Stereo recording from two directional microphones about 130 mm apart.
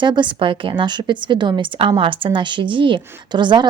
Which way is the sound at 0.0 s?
35° right (ahead or behind).